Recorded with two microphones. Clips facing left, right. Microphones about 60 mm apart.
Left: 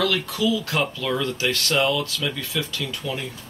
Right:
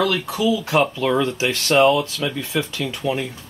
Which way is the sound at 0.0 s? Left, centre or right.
Right.